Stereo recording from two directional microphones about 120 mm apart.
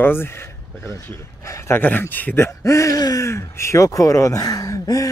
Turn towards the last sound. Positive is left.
turn(degrees=30)  # may be behind; listen again after turning